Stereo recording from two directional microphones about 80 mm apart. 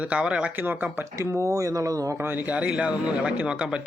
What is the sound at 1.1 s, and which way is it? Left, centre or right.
Speech, right.